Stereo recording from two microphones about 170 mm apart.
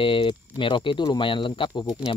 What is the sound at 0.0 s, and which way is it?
Speech, 30° left (ahead or behind).